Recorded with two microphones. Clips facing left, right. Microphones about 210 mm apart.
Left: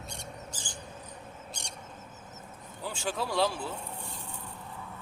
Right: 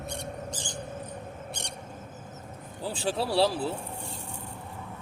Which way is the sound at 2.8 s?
35° right (ahead or behind).